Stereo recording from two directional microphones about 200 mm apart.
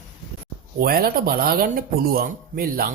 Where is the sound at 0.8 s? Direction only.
50° right (ahead or behind).